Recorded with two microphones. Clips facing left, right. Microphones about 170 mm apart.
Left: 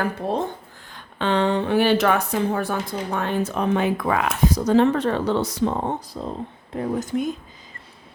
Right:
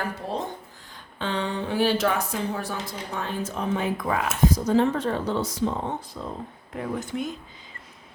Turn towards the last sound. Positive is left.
turn(degrees=40)  # may be behind; listen again after turning